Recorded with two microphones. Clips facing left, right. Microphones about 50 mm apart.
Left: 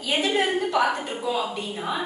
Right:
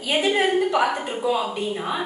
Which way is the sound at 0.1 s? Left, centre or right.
Centre.